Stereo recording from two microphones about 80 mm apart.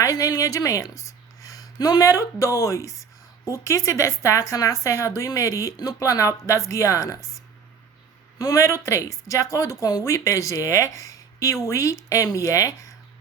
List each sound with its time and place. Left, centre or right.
0.0 s a woman's voice: left
8.4 s speech: left